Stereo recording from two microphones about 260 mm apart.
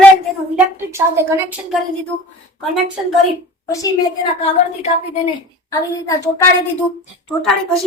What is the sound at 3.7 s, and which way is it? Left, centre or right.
A woman's voice, centre.